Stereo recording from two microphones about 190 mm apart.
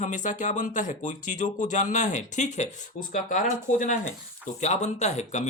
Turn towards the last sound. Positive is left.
turn(degrees=35)  # may be behind; listen again after turning